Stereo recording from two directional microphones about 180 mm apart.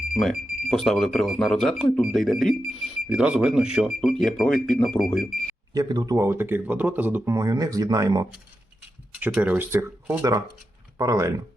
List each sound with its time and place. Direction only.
0.1 s speech: centre (ahead or behind)
5.7 s speech: 20° right (ahead or behind)
9.2 s speech: 10° right (ahead or behind)